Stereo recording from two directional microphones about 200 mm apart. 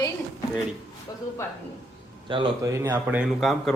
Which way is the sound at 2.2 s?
25° right (ahead or behind).